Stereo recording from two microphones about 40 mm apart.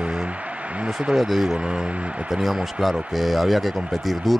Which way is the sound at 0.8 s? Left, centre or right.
Right.